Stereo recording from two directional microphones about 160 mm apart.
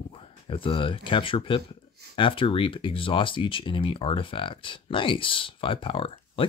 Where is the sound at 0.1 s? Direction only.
35° left (ahead or behind).